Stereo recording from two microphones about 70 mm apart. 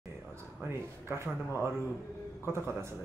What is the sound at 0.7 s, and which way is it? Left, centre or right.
Speech, right.